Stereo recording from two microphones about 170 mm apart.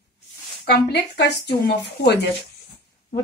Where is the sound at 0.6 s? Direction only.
80° left.